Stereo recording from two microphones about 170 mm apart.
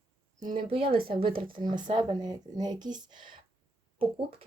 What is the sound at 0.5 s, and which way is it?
A woman's voice, 30° right (ahead or behind).